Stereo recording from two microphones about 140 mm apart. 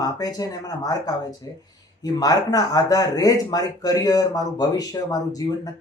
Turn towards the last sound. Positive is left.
turn(degrees=25)  # may be behind; listen again after turning